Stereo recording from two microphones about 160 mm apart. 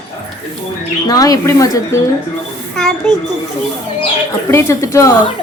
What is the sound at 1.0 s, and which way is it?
Speech, 25° left (ahead or behind).